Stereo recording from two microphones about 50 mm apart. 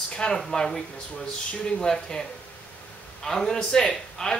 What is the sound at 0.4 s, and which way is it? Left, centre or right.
Speech, centre.